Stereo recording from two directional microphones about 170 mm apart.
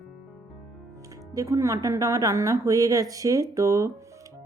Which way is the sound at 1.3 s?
20° right (ahead or behind).